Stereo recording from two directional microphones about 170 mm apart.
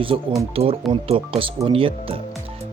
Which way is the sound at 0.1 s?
30° right (ahead or behind).